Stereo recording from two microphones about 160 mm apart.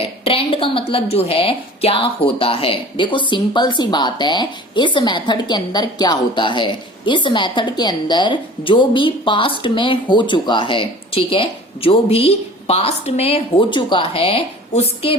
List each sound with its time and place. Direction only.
0.0 s a woman's voice: 35° left (ahead or behind)